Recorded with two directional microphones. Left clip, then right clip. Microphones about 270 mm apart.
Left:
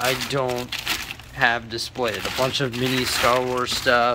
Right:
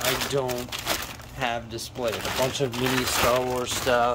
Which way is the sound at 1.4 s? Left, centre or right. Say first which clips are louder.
Left 8 dB; centre.